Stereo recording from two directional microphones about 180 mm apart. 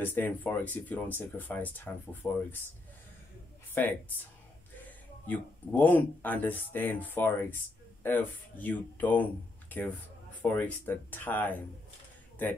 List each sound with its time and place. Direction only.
0.0 s speech: 10° left (ahead or behind)
3.8 s speech: 10° left (ahead or behind)